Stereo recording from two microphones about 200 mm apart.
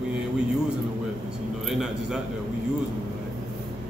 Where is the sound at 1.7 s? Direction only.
Centre (ahead or behind).